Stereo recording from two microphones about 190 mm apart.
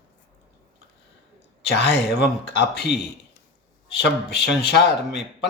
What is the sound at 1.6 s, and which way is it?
Speech, 60° left (ahead or behind).